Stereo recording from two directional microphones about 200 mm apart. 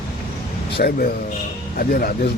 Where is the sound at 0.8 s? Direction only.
45° left (ahead or behind).